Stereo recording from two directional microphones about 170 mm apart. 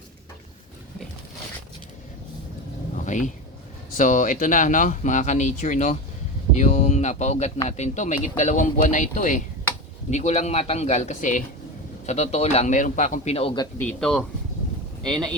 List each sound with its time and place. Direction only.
3.0 s a sound: 45° left (ahead or behind)
3.9 s speech: 50° left (ahead or behind)
13.3 s speech: 30° left (ahead or behind)
13.7 s speech: 5° left (ahead or behind)